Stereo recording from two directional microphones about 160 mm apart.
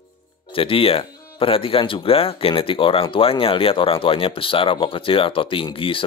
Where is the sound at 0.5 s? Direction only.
35° left (ahead or behind).